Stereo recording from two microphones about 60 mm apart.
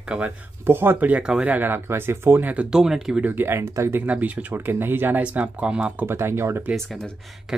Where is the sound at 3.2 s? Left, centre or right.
Right.